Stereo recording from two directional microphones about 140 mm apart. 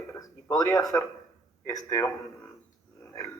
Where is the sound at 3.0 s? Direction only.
25° left (ahead or behind).